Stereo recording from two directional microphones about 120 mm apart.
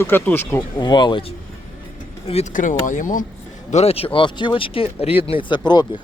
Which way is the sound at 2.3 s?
75° left (ahead or behind).